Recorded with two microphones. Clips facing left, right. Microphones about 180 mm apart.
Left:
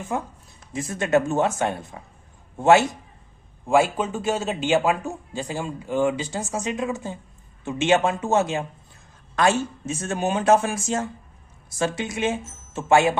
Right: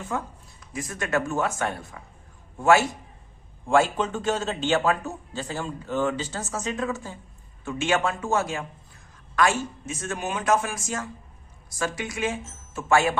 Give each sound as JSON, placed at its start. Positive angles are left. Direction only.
{"t": 0.1, "sound": "a man's voice", "side_deg": 15}
{"t": 3.7, "sound": "a man's voice", "side_deg": 10}